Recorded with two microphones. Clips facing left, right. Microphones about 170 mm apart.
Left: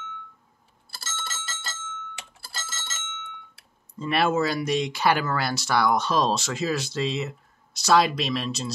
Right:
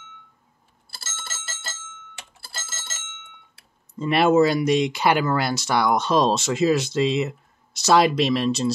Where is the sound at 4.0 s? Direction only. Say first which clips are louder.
Right 6 dB; 20° right (ahead or behind).